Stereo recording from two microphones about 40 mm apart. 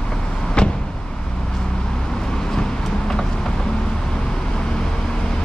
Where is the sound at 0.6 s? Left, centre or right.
Left.